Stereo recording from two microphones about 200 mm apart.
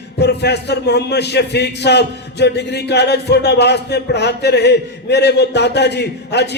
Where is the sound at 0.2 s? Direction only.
55° left (ahead or behind).